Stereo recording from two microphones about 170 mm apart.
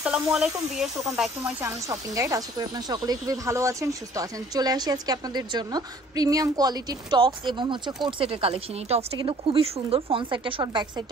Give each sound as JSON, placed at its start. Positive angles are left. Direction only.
{"t": 0.0, "sound": "speech", "side_deg": -5}
{"t": 1.7, "sound": "speech", "side_deg": -20}